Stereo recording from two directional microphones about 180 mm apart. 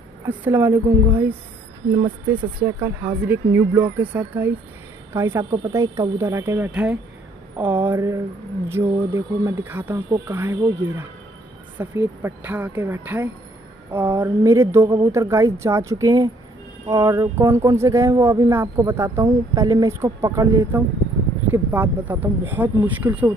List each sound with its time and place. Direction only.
0.2 s speech: 10° right (ahead or behind)
2.6 s speech: 10° right (ahead or behind)